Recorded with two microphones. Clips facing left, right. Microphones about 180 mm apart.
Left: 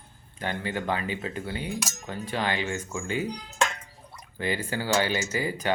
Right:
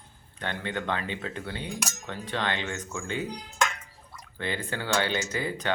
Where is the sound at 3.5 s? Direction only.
30° left (ahead or behind).